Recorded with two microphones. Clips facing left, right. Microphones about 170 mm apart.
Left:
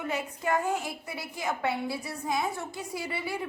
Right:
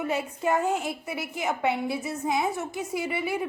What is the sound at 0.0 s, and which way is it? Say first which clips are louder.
A woman's voice: right 4 dB; 20° right (ahead or behind).